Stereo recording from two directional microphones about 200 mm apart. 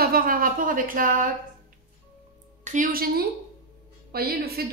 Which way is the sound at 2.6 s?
40° right (ahead or behind).